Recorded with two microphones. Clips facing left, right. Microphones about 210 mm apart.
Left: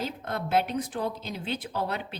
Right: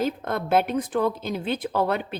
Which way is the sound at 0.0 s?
50° right (ahead or behind).